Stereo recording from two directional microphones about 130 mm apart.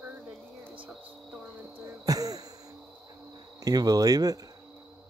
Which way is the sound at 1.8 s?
25° right (ahead or behind).